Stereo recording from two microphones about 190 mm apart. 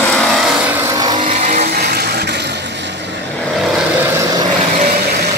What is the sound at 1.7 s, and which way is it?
Vehicle, 60° right (ahead or behind).